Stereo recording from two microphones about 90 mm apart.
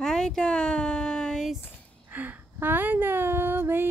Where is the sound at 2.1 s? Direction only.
20° right (ahead or behind).